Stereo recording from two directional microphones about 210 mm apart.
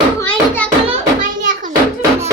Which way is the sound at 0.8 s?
35° right (ahead or behind).